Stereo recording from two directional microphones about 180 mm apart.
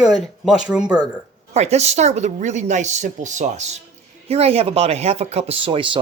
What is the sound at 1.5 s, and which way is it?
Speech, 35° right (ahead or behind).